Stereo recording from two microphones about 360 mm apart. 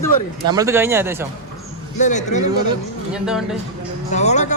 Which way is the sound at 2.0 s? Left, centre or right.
Centre.